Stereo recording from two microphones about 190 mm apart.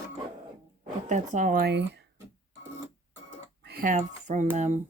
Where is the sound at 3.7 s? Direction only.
45° right (ahead or behind).